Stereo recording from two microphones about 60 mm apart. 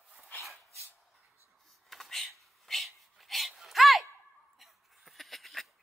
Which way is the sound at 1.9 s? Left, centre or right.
Centre.